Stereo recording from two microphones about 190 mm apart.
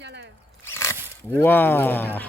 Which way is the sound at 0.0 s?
65° right (ahead or behind).